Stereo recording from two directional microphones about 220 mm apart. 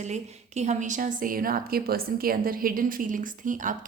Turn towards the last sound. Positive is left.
turn(degrees=-35)  # may be behind; listen again after turning